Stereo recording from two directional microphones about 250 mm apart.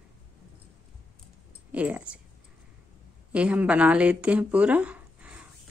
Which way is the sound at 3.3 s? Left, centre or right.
Centre.